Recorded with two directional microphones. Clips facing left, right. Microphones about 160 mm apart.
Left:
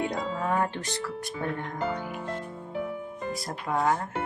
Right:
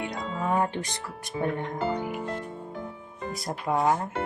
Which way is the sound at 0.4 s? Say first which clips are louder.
Right 3 dB; 15° right (ahead or behind).